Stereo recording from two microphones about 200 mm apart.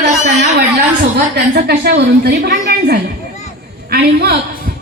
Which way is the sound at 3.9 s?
50° right (ahead or behind).